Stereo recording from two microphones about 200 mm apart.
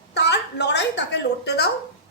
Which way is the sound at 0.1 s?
55° left (ahead or behind).